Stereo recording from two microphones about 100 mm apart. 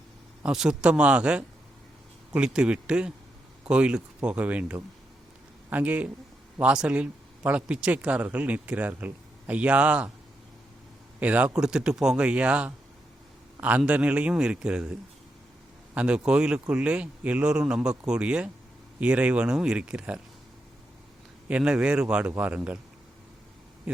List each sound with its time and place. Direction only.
0.4 s speech: 5° right (ahead or behind)
11.2 s speech: 15° right (ahead or behind)
16.0 s speech: 10° right (ahead or behind)
21.4 s speech: 10° right (ahead or behind)